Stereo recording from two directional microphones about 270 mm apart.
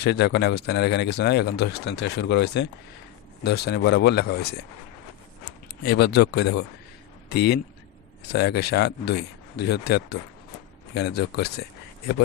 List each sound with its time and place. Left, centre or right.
0.0 s speech: left
5.8 s a man's voice: left